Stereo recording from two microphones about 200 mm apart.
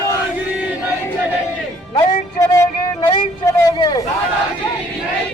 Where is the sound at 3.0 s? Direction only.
20° left (ahead or behind).